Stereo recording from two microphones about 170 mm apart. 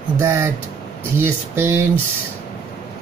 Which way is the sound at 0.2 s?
15° right (ahead or behind).